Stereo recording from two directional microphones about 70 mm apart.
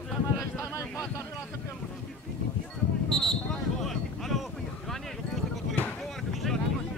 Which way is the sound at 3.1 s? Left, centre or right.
Centre.